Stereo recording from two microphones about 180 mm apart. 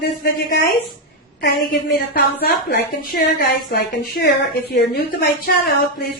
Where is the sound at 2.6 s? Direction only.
55° left (ahead or behind).